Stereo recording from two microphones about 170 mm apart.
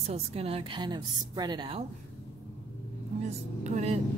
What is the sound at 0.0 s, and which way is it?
A woman's voice, 35° right (ahead or behind).